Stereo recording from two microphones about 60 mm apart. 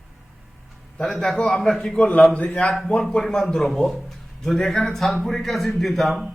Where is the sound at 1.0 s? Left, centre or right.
Centre.